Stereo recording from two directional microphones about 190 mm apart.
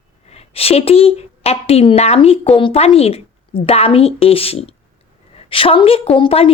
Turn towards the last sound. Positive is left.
turn(degrees=30)  # may be behind; listen again after turning